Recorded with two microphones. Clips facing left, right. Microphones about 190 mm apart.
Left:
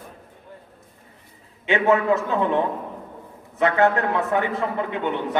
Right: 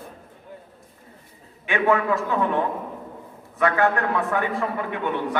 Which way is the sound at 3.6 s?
20° left (ahead or behind).